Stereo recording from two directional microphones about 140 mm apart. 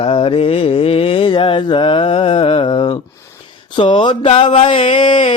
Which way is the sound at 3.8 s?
35° left (ahead or behind).